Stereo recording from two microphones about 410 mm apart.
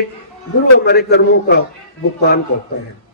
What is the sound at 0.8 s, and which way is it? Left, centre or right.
Speech, left.